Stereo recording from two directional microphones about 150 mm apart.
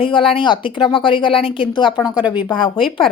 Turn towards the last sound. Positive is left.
turn(degrees=0)  # may be behind; listen again after turning